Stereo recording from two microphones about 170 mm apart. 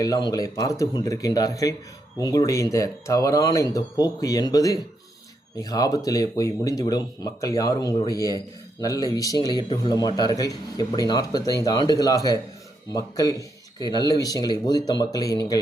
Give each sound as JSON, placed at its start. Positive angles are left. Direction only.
{"t": 0.0, "sound": "a man's voice", "side_deg": 20}